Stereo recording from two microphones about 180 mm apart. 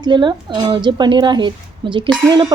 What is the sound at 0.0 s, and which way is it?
Speech, 25° right (ahead or behind).